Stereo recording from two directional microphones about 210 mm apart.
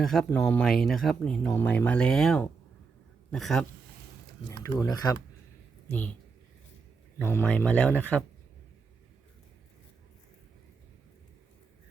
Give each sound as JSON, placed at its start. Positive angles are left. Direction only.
{"t": 0.0, "sound": "speech", "side_deg": 0}
{"t": 4.6, "sound": "speech", "side_deg": 20}
{"t": 5.9, "sound": "speech", "side_deg": 5}
{"t": 7.2, "sound": "speech", "side_deg": 10}